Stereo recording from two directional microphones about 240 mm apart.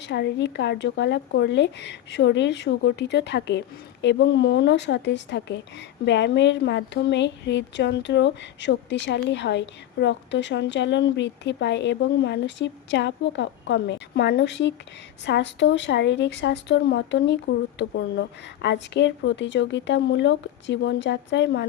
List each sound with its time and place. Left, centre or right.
0.0 s speech: left